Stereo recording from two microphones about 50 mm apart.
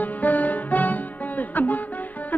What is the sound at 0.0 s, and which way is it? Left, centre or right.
Music, left.